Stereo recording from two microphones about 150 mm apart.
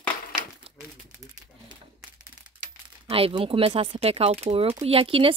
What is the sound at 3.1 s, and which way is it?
Speech, 35° right (ahead or behind).